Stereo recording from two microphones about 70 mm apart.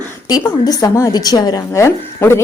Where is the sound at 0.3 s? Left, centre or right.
Left.